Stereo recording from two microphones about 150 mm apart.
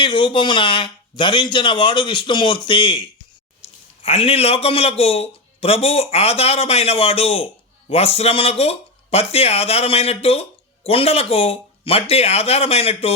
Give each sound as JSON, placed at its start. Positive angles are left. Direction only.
{"t": 0.0, "sound": "a man's voice", "side_deg": 35}
{"t": 3.6, "sound": "a sound", "side_deg": 40}
{"t": 4.0, "sound": "a man's voice", "side_deg": 40}